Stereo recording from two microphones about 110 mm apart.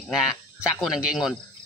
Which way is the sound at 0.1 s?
5° right (ahead or behind).